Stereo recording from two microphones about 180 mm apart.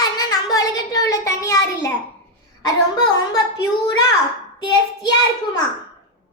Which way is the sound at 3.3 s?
20° left (ahead or behind).